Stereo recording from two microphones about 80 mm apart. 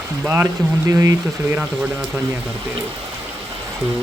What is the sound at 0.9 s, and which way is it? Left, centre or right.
Speech, right.